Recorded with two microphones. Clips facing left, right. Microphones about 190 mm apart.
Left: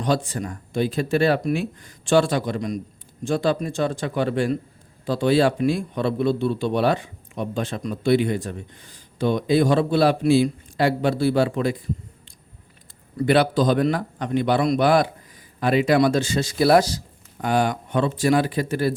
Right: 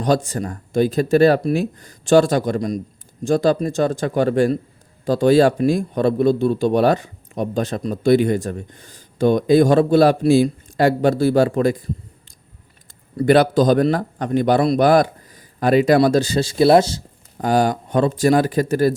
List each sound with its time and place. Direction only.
0.0 s a man's voice: 45° right (ahead or behind)
13.1 s a man's voice: 45° right (ahead or behind); by 17.0 s 25° right (ahead or behind)
17.3 s a man's voice: 40° right (ahead or behind)